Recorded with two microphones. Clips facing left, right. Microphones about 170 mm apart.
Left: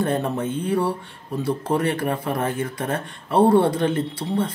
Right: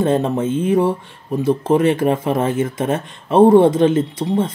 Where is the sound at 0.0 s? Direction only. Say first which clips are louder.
Right 6 dB; 20° right (ahead or behind).